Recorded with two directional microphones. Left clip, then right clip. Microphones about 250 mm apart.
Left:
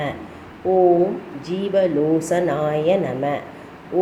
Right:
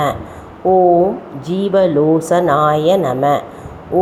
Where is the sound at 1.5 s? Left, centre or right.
Centre.